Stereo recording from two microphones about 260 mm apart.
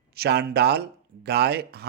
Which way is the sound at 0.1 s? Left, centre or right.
Right.